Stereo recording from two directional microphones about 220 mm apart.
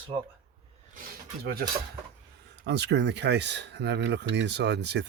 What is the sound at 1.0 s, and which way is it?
Speech, 45° right (ahead or behind).